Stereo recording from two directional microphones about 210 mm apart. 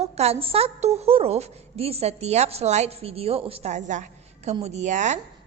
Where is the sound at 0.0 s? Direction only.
30° right (ahead or behind).